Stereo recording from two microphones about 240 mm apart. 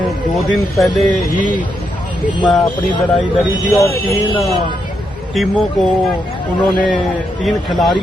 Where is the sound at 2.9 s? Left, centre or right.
Centre.